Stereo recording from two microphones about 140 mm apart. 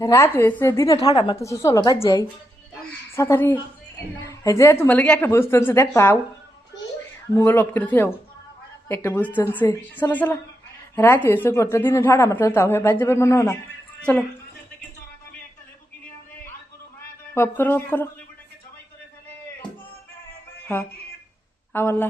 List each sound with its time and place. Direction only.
0.0 s a woman's voice: 20° left (ahead or behind)
1.1 s a woman's voice: 35° left (ahead or behind)
1.4 s a woman's voice: 20° left (ahead or behind)
3.2 s a woman's voice: 20° left (ahead or behind)
7.3 s a man's voice: 15° left (ahead or behind)
14.0 s a woman's voice: 10° left (ahead or behind)
17.3 s a man's voice: 15° left (ahead or behind)
21.7 s speech: 15° left (ahead or behind)